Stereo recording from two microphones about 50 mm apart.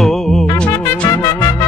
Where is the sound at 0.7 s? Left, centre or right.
Left.